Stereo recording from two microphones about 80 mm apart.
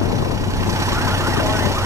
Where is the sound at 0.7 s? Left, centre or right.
Right.